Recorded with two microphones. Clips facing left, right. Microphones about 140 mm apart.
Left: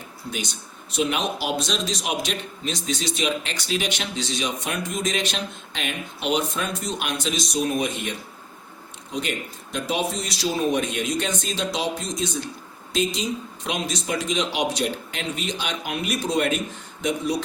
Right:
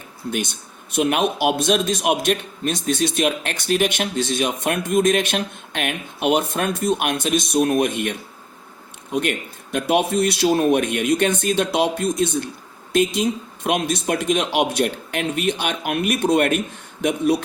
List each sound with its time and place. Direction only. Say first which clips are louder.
0.3 s speech: right 7 dB; 55° right (ahead or behind)
9.1 s speech: right 6 dB; 55° right (ahead or behind)